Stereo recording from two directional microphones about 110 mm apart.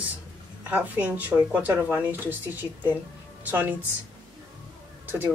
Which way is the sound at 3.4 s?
15° right (ahead or behind).